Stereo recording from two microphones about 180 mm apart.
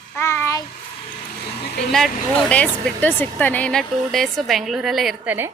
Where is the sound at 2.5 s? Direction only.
5° left (ahead or behind).